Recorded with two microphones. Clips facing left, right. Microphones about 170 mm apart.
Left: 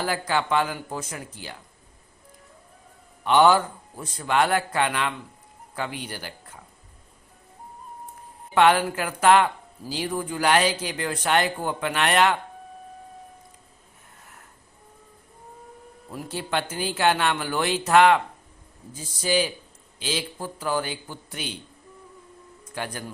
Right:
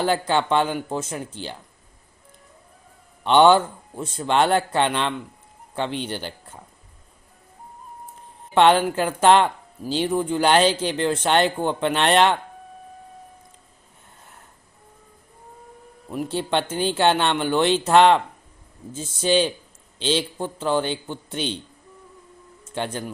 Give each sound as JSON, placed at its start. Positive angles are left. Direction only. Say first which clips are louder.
{"t": 0.0, "sound": "a man's voice", "louder": "right 5 dB", "side_deg": -25}
{"t": 3.2, "sound": "a man's voice", "louder": "right 3 dB", "side_deg": -25}
{"t": 8.5, "sound": "a man's voice", "louder": "right 3 dB", "side_deg": -30}
{"t": 9.8, "sound": "a man's voice", "louder": "right 6 dB", "side_deg": -15}
{"t": 16.3, "sound": "a man's voice", "louder": "right 4 dB", "side_deg": -30}
{"t": 22.6, "sound": "speech", "louder": "right 5 dB", "side_deg": -25}